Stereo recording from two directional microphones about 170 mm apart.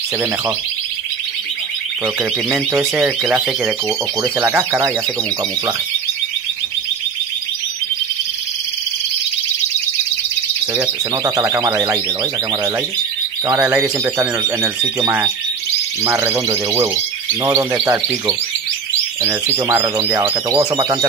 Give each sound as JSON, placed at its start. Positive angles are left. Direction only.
{"t": 2.8, "sound": "speech", "side_deg": -5}
{"t": 10.8, "sound": "speech", "side_deg": -20}
{"t": 13.5, "sound": "speech", "side_deg": -15}